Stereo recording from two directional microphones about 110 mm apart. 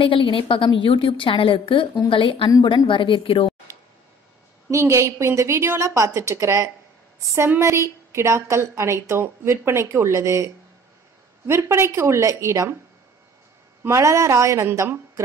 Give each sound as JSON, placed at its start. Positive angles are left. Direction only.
{"t": 0.0, "sound": "a woman's voice", "side_deg": 50}
{"t": 4.6, "sound": "a woman's voice", "side_deg": -25}
{"t": 13.8, "sound": "a woman's voice", "side_deg": -25}